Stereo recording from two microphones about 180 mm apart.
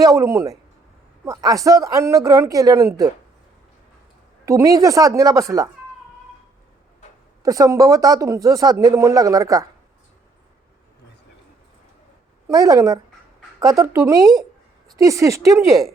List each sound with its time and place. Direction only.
0.0 s a woman's voice: 15° right (ahead or behind)
4.4 s a woman's voice: 15° right (ahead or behind)
7.4 s speech: 20° right (ahead or behind)
12.5 s a woman's voice: 20° right (ahead or behind)